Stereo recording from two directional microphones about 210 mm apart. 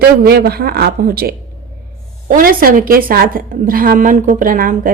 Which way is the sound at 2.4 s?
40° right (ahead or behind).